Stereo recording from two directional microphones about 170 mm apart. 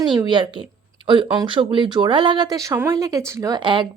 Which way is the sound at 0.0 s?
25° right (ahead or behind).